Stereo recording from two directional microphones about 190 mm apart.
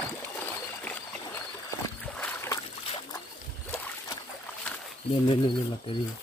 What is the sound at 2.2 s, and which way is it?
Boat, 15° left (ahead or behind).